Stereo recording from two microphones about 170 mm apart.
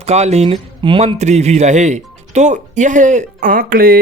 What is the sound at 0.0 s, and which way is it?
Speech, 40° right (ahead or behind).